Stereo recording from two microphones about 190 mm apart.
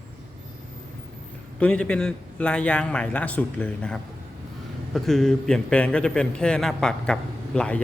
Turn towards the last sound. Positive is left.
turn(degrees=5)  # may be behind; listen again after turning